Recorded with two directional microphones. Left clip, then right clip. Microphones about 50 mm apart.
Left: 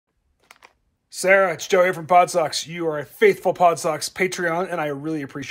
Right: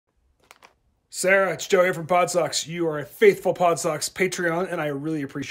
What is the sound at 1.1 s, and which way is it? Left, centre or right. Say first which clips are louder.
Speech: left 3 dB; right.